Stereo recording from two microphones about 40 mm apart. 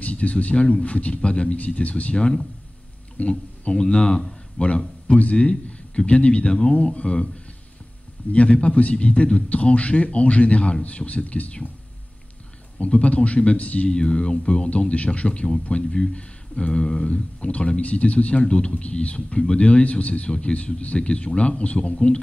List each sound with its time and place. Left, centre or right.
0.0 s speech: left
8.3 s speech: left
12.7 s speech: left
13.8 s speech: left
17.0 s speech: left